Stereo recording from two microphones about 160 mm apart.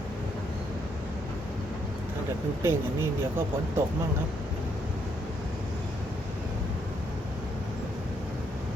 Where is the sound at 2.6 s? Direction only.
15° right (ahead or behind).